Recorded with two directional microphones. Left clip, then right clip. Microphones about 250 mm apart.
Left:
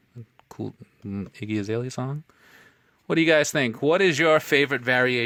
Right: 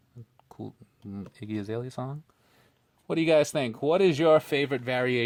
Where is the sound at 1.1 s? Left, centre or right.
Left.